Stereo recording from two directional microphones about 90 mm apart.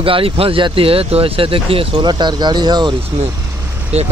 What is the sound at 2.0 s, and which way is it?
Speech, 55° right (ahead or behind).